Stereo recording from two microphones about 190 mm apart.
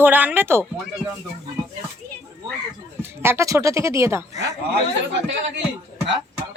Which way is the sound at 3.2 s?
15° right (ahead or behind).